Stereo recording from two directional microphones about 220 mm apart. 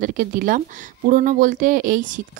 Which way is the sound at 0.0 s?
40° right (ahead or behind).